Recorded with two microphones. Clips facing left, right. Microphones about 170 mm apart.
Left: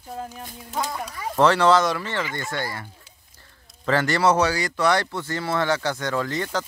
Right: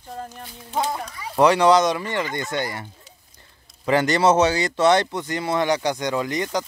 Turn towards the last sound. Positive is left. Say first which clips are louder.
# right 2 dB
turn(degrees=-15)  # may be behind; listen again after turning